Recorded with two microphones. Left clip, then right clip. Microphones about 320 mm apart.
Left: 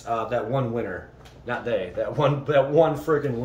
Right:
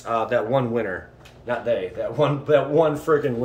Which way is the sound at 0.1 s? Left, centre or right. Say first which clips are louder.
Right 4 dB; centre.